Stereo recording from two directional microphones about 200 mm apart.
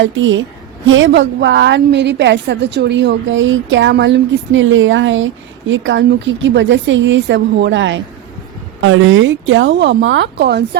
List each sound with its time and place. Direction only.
0.0 s a woman's voice: 70° right (ahead or behind)
8.8 s a woman's voice: 90° right; by 10.8 s 60° right (ahead or behind)